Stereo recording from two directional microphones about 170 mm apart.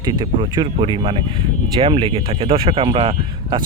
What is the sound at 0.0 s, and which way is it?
Speech, 25° right (ahead or behind).